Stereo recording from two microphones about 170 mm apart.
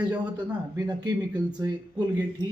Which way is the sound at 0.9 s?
25° right (ahead or behind).